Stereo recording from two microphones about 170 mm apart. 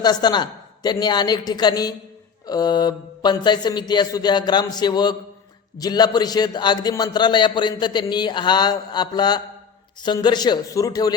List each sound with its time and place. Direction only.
0.0 s a man's voice: 25° left (ahead or behind)